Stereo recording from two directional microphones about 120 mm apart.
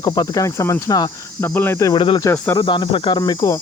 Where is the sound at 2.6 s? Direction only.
40° left (ahead or behind).